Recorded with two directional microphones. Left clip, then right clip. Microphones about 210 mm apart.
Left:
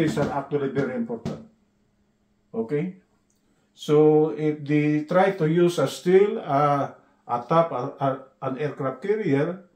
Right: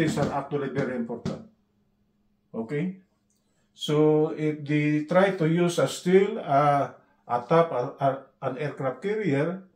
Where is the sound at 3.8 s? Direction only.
20° left (ahead or behind).